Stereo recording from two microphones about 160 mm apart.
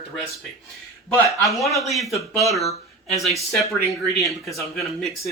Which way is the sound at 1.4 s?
20° left (ahead or behind).